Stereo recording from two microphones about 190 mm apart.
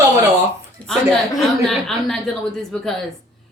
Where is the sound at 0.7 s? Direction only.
5° left (ahead or behind).